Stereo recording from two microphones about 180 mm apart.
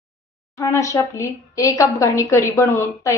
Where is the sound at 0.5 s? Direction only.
15° left (ahead or behind).